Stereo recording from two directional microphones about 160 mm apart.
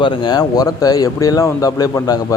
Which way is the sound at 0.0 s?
25° left (ahead or behind).